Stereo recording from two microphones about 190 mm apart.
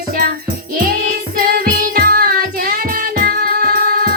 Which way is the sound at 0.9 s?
50° right (ahead or behind).